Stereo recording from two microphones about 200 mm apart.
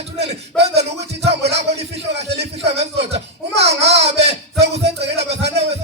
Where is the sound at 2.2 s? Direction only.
55° right (ahead or behind).